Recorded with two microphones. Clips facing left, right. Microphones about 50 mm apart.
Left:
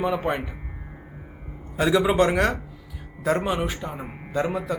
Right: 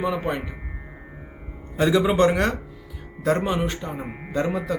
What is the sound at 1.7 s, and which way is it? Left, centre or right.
A man's voice, centre.